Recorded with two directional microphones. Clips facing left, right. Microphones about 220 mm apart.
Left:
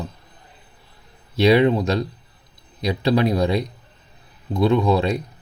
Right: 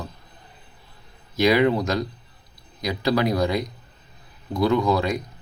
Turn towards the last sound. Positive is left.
turn(degrees=30)  # may be behind; listen again after turning